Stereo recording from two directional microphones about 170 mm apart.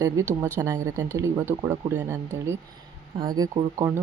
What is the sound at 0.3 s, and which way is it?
Speech, 10° left (ahead or behind).